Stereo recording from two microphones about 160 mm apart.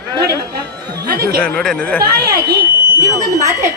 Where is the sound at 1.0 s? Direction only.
75° right (ahead or behind).